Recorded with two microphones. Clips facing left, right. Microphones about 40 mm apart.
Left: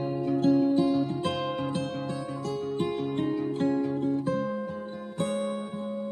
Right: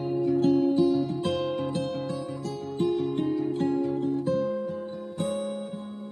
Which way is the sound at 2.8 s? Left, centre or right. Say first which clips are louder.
Right 6 dB; centre.